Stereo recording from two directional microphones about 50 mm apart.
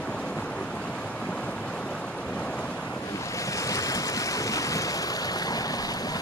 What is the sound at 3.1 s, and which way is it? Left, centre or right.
Waves, left.